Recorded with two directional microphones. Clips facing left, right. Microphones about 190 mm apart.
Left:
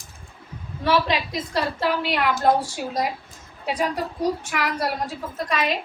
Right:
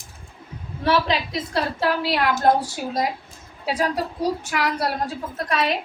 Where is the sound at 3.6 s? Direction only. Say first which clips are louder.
Right 1 dB; 5° right (ahead or behind).